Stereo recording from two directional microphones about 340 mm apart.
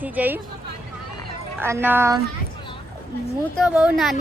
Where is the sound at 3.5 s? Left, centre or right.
Centre.